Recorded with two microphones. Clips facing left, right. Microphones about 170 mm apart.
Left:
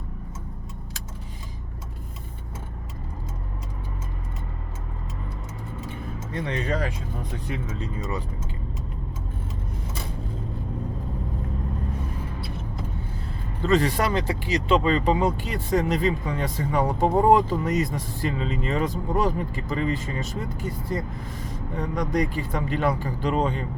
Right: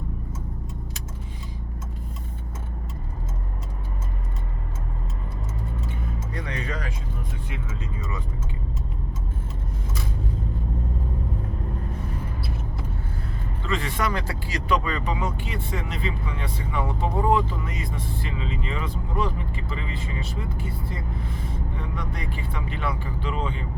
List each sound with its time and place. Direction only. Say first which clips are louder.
6.3 s speech: left 7 dB; 30° left (ahead or behind)
13.6 s speech: left 6 dB; 40° left (ahead or behind)
14.1 s speech: left 5 dB; 20° left (ahead or behind); by 23.6 s 40° left (ahead or behind)